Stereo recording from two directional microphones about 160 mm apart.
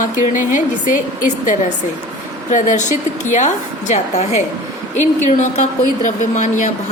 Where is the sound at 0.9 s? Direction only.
55° left (ahead or behind).